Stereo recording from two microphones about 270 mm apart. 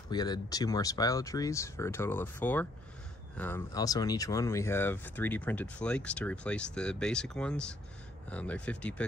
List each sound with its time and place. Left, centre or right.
0.1 s speech: centre